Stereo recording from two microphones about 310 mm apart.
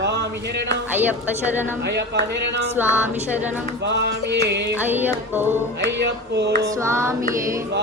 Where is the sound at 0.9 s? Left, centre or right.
Centre.